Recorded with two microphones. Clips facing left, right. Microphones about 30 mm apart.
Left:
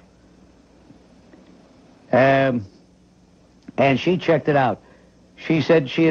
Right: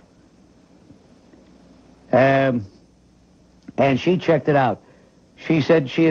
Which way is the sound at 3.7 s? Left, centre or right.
Centre.